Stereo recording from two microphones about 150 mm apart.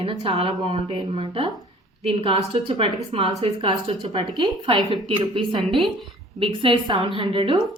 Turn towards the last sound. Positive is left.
turn(degrees=-35)  # may be behind; listen again after turning